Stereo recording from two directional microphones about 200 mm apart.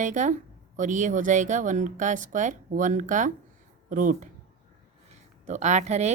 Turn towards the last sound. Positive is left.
turn(degrees=-35)  # may be behind; listen again after turning